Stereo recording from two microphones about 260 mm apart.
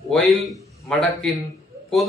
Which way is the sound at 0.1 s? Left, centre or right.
Centre.